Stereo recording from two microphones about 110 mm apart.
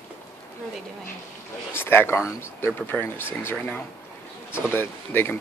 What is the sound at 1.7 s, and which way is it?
Speech, 20° left (ahead or behind).